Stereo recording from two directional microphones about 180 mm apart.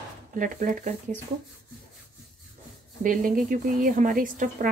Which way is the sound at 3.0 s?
50° right (ahead or behind).